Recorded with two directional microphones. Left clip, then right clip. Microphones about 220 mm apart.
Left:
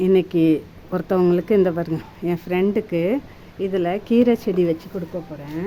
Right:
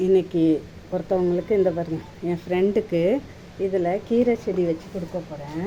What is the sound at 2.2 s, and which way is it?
Speech, 20° left (ahead or behind).